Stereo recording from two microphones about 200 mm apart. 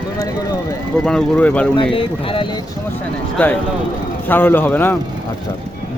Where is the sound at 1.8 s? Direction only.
25° left (ahead or behind).